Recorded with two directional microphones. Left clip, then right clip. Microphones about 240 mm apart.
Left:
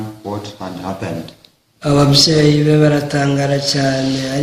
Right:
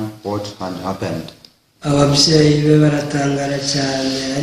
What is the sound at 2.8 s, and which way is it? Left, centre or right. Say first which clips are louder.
Mantra: left 2 dB; left.